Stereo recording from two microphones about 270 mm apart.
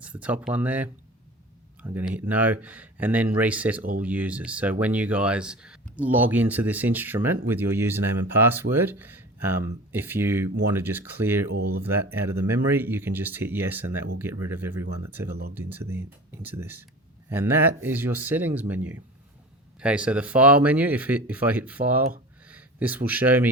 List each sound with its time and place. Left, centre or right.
0.0 s speech: centre
11.5 s speech: right
12.1 s speech: centre